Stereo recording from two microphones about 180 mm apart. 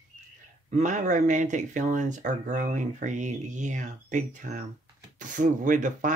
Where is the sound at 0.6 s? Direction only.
45° right (ahead or behind).